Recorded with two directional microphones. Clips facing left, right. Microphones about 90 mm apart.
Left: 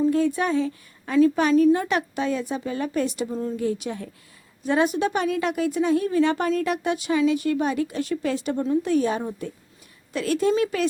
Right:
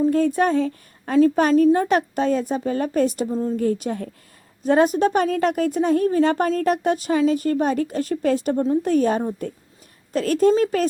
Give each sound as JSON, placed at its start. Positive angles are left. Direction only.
{"t": 0.1, "sound": "a woman's voice", "side_deg": -45}
{"t": 3.2, "sound": "a woman's voice", "side_deg": -25}
{"t": 3.6, "sound": "a woman's voice", "side_deg": -45}